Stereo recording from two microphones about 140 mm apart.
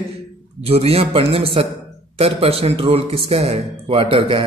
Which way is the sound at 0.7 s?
45° right (ahead or behind).